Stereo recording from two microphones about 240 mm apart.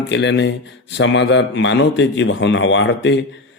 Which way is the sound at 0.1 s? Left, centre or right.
Left.